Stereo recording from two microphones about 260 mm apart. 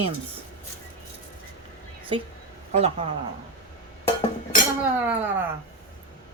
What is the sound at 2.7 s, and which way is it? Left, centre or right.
Speech, right.